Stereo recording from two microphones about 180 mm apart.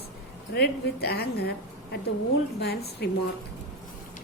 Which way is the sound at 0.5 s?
65° left (ahead or behind).